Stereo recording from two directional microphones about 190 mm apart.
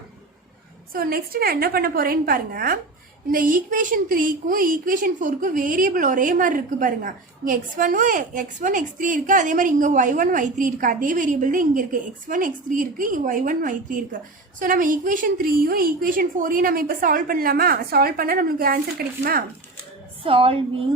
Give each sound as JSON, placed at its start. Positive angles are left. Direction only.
{"t": 0.9, "sound": "a woman's voice", "side_deg": -50}
{"t": 20.2, "sound": "a woman's voice", "side_deg": -30}